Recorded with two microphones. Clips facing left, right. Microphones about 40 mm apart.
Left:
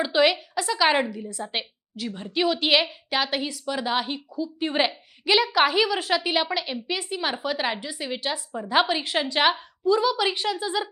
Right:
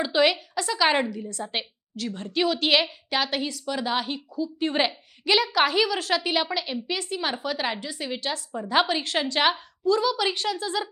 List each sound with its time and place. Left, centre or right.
0.0 s a woman's voice: centre